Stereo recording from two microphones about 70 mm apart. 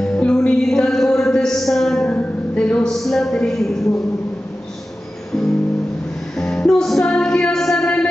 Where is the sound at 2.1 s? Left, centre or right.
Centre.